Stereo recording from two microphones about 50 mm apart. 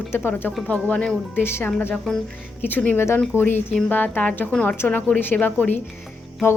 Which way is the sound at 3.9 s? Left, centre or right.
Left.